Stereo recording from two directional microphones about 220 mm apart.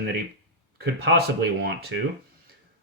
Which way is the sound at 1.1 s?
50° right (ahead or behind).